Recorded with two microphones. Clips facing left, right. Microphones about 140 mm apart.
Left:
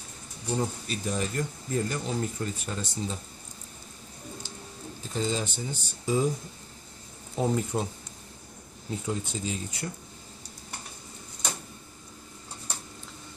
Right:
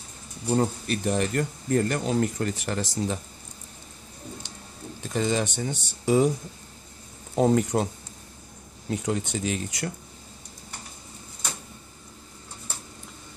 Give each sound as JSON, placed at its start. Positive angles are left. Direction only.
{"t": 0.6, "sound": "speech", "side_deg": -60}
{"t": 5.0, "sound": "speech", "side_deg": -70}
{"t": 7.3, "sound": "speech", "side_deg": -75}
{"t": 8.9, "sound": "speech", "side_deg": -75}